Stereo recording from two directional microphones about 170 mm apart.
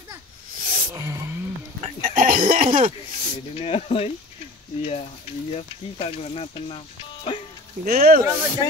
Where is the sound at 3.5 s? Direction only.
35° left (ahead or behind).